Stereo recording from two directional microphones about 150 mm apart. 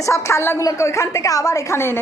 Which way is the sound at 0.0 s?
20° left (ahead or behind).